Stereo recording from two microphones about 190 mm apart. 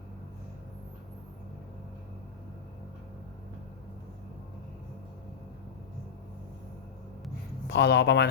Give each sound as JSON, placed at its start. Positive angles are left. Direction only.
{"t": 7.7, "sound": "speech", "side_deg": 65}